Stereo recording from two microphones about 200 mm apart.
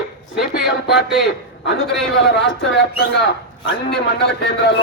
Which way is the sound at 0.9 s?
60° left (ahead or behind).